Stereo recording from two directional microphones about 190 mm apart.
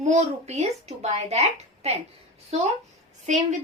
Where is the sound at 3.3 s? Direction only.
40° right (ahead or behind).